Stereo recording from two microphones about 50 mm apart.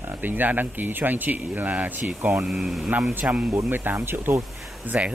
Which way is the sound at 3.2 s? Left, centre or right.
Right.